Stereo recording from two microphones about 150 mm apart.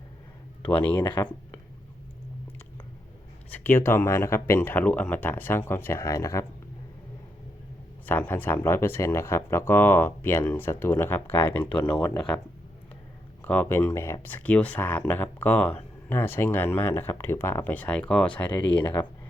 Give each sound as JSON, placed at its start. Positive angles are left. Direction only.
{"t": 0.7, "sound": "speech", "side_deg": 10}
{"t": 1.0, "sound": "speech", "side_deg": 30}
{"t": 3.5, "sound": "speech", "side_deg": 15}
{"t": 8.0, "sound": "speech", "side_deg": 10}
{"t": 13.4, "sound": "speech", "side_deg": 10}